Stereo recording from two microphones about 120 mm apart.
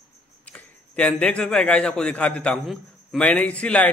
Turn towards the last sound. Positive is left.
turn(degrees=10)  # may be behind; listen again after turning